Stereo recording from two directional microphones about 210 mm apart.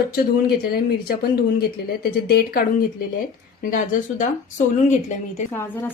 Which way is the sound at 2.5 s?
45° left (ahead or behind).